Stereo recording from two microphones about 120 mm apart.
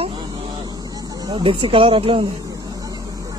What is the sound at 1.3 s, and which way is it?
Speech, 45° right (ahead or behind).